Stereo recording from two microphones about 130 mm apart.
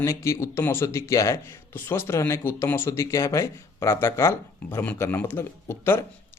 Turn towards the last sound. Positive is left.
turn(degrees=20)  # may be behind; listen again after turning